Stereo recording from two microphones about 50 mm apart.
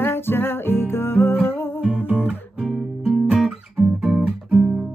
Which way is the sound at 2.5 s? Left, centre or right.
Centre.